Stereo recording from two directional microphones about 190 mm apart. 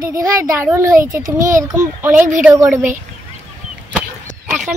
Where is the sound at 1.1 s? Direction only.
45° right (ahead or behind).